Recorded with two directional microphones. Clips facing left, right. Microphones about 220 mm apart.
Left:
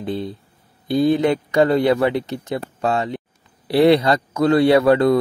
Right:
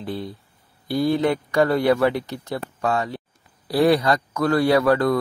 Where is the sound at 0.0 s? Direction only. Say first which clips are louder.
Left 4 dB; 20° left (ahead or behind).